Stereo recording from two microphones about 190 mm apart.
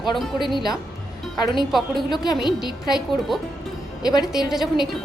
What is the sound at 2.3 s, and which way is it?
Speech, 20° left (ahead or behind).